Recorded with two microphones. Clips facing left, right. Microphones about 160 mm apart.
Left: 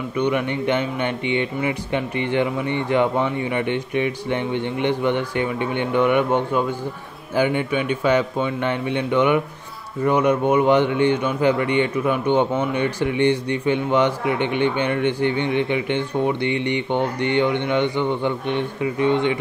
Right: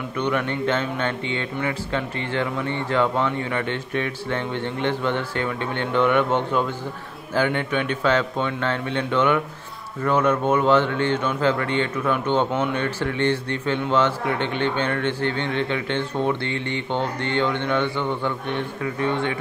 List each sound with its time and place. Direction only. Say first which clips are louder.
0.2 s a man's voice: left 2 dB; 10° left (ahead or behind)